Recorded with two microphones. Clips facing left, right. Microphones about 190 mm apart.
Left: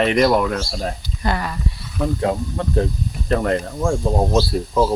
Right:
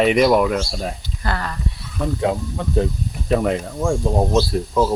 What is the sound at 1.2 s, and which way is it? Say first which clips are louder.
Speech: left 3 dB; 15° left (ahead or behind).